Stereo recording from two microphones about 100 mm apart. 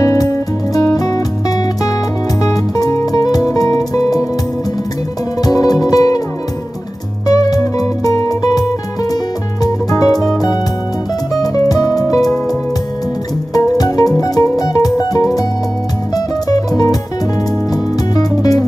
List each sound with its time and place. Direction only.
0.0 s music: 35° left (ahead or behind)
2.4 s music: 35° left (ahead or behind)
5.4 s music: 40° left (ahead or behind)
7.2 s music: 35° left (ahead or behind)
11.4 s music: 40° left (ahead or behind)
13.5 s music: 40° left (ahead or behind)
16.4 s music: 35° left (ahead or behind)
18.1 s music: 40° left (ahead or behind)